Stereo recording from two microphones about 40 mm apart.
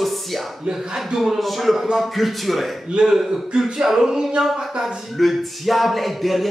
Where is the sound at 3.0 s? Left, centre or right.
Right.